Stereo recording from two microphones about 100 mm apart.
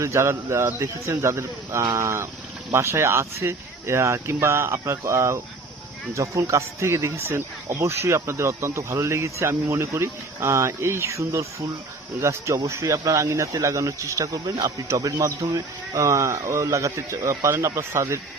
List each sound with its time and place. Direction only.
0.0 s speech: 30° right (ahead or behind)